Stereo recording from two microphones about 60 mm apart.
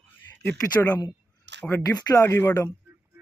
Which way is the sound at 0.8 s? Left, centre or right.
Left.